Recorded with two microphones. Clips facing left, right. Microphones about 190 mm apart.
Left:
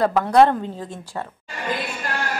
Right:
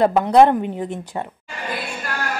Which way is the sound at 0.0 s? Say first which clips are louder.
Right 2 dB; 20° right (ahead or behind).